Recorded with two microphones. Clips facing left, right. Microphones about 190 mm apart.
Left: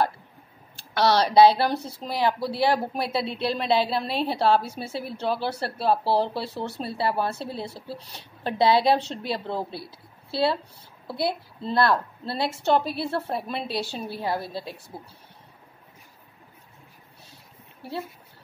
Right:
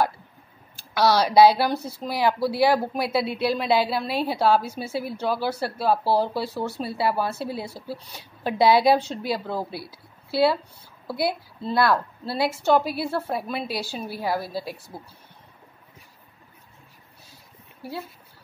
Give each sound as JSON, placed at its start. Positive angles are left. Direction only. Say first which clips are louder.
{"t": 0.7, "sound": "a woman's voice", "louder": "right 1 dB", "side_deg": -5}
{"t": 9.4, "sound": "a woman's voice", "louder": "right 1 dB", "side_deg": 25}
{"t": 9.7, "sound": "a woman's voice", "louder": "right 2 dB", "side_deg": -10}